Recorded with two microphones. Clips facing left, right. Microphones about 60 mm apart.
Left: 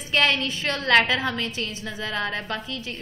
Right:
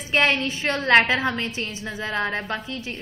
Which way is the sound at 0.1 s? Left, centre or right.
Right.